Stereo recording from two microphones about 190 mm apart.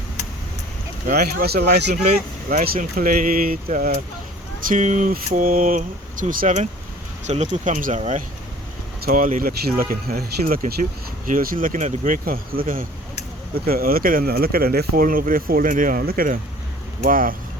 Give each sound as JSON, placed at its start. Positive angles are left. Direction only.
{"t": 1.0, "sound": "speech", "side_deg": -50}
{"t": 2.0, "sound": "speech", "side_deg": -45}